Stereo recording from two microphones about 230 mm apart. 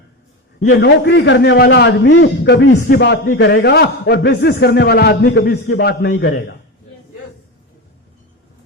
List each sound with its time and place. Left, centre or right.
0.7 s a man's voice: left